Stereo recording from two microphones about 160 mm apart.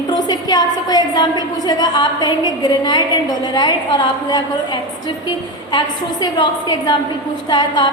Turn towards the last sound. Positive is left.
turn(degrees=25)  # may be behind; listen again after turning